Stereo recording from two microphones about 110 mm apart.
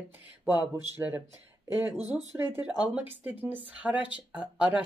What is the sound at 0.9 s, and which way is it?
Speech, 20° right (ahead or behind).